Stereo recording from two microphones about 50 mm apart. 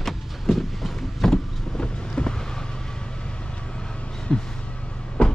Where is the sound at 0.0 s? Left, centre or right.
Centre.